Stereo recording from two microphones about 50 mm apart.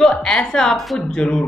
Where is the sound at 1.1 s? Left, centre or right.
Centre.